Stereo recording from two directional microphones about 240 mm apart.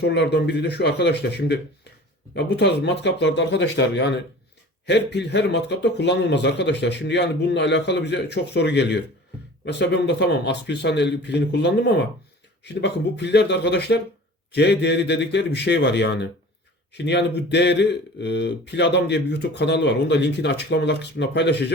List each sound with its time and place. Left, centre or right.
0.0 s speech: left